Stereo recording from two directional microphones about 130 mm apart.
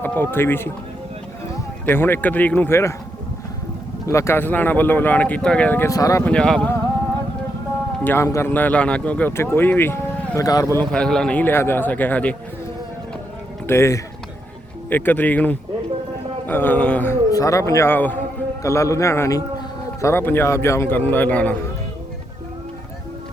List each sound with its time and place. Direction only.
0.0 s speech: 15° left (ahead or behind)
1.8 s speech: 15° left (ahead or behind)
4.0 s speech: 20° left (ahead or behind)
5.9 s speech: 25° left (ahead or behind)
6.2 s speech: 5° left (ahead or behind)
8.0 s speech: 20° left (ahead or behind)
10.9 s speech: 5° left (ahead or behind)
13.7 s speech: 20° left (ahead or behind)
17.3 s speech: 25° left (ahead or behind)